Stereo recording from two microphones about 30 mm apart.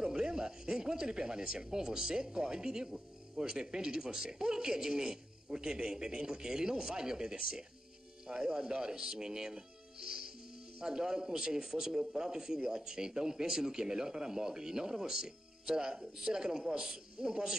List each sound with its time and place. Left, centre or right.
0.1 s speech: right